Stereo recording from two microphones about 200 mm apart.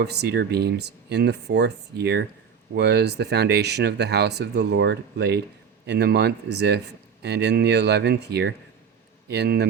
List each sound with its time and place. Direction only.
0.0 s speech: 55° right (ahead or behind)